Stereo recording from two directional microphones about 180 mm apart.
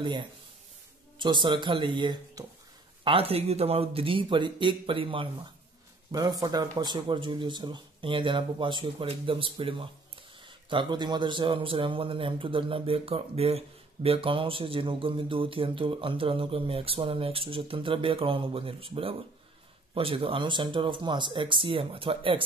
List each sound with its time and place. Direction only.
1.1 s a man's voice: 25° right (ahead or behind)